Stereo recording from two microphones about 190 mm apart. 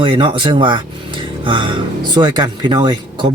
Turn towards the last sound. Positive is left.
turn(degrees=-25)  # may be behind; listen again after turning